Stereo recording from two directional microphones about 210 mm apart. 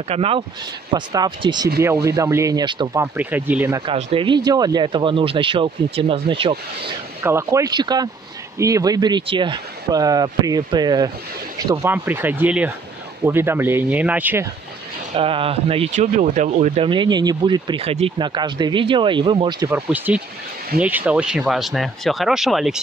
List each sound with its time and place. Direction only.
0.1 s speech: 30° right (ahead or behind); by 3.8 s 10° right (ahead or behind)
3.8 s speech: 25° right (ahead or behind)
7.2 s speech: 15° right (ahead or behind)
15.1 s speech: 25° right (ahead or behind)
19.7 s speech: 5° right (ahead or behind)